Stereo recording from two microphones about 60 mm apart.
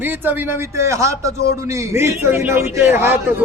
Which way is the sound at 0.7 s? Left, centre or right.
Right.